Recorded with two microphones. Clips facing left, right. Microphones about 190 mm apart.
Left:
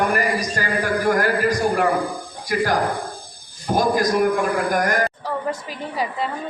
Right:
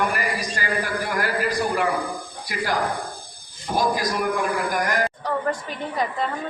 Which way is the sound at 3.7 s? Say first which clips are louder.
Left 5 dB; 50° left (ahead or behind).